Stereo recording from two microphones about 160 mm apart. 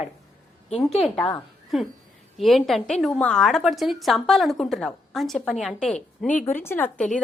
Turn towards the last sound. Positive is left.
turn(degrees=10)  # may be behind; listen again after turning